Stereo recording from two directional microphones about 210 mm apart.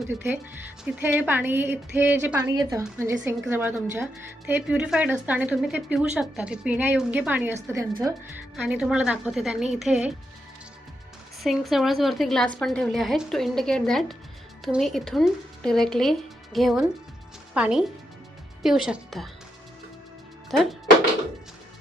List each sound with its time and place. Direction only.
0.9 s a woman's voice: 10° right (ahead or behind)
8.5 s a woman's voice: 5° right (ahead or behind)
11.4 s a woman's voice: centre (ahead or behind)
20.5 s a woman's voice: centre (ahead or behind)